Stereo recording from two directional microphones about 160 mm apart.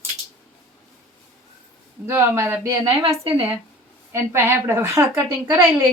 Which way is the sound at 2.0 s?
15° right (ahead or behind).